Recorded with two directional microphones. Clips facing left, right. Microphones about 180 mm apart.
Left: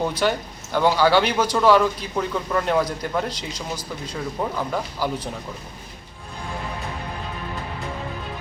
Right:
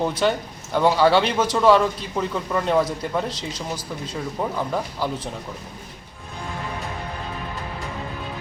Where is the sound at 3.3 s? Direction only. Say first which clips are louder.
Right 1 dB; 25° right (ahead or behind).